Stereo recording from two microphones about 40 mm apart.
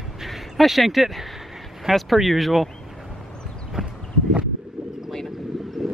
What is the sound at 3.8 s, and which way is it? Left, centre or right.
Clip-clop, right.